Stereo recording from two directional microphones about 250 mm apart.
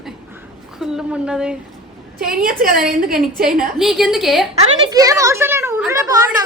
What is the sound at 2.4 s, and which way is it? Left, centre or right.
Speech, right.